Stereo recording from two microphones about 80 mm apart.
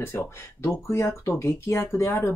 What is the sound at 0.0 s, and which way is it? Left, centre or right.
Speech, left.